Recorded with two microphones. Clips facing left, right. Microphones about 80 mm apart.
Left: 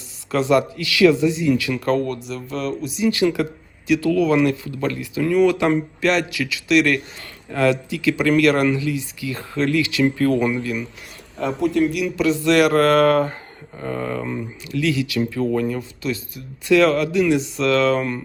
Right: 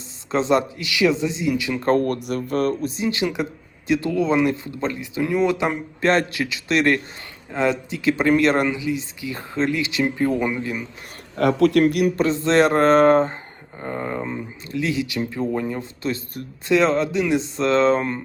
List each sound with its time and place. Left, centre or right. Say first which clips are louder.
0.3 s speech: left 2 dB; right
1.9 s speech: right 3 dB; right
3.0 s speech: left 7 dB; right
6.1 s speech: right 2 dB; right
11.3 s speech: right 3 dB; right
12.2 s speech: left 3 dB; right